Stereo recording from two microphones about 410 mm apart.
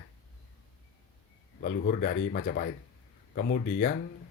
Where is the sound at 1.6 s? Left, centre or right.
Centre.